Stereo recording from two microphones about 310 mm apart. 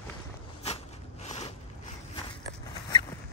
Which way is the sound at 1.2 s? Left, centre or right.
Left.